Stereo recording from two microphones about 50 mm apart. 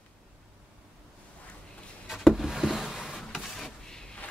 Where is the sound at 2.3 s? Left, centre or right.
Centre.